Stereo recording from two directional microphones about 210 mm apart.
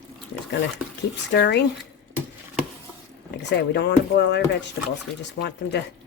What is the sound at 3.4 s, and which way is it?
Speech, 55° left (ahead or behind).